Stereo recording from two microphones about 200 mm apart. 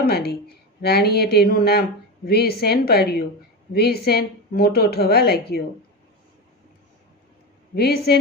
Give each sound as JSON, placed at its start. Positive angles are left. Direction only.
{"t": 0.1, "sound": "a woman's voice", "side_deg": 50}
{"t": 7.8, "sound": "a woman's voice", "side_deg": 55}